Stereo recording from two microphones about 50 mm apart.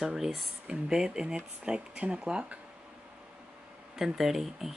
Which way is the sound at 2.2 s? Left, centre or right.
Centre.